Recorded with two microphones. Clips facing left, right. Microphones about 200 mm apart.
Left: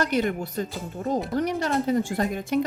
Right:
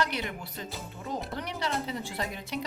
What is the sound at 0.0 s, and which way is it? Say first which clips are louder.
A woman's voice: left 8 dB; 45° left (ahead or behind).